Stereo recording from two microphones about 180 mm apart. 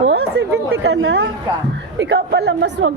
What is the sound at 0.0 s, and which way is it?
Chatter, 70° right (ahead or behind).